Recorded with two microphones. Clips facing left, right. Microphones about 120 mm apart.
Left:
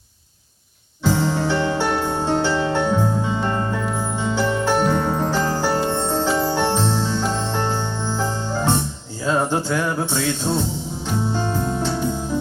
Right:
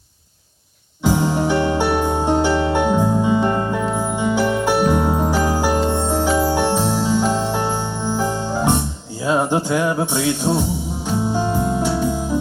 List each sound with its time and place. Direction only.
1.0 s music: 15° right (ahead or behind)